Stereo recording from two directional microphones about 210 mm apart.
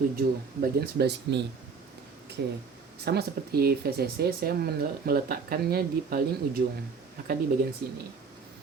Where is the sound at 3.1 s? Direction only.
50° right (ahead or behind).